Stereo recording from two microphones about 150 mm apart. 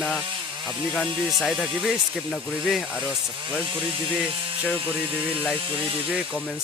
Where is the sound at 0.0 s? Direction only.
5° left (ahead or behind).